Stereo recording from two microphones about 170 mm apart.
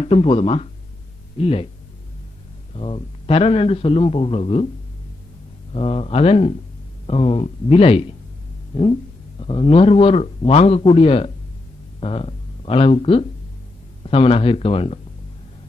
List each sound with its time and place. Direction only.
0.0 s a man's voice: 35° left (ahead or behind)
2.7 s a man's voice: 30° left (ahead or behind)
5.7 s a man's voice: 35° left (ahead or behind)
9.4 s a man's voice: 30° left (ahead or behind)